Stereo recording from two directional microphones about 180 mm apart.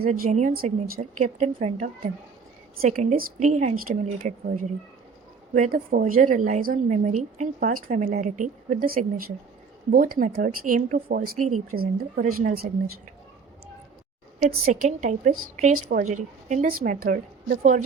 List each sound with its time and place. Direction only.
0.1 s a woman's voice: 40° right (ahead or behind)
14.3 s a woman's voice: 45° right (ahead or behind)